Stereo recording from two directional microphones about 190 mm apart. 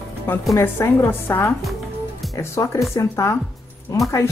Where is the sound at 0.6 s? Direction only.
15° left (ahead or behind).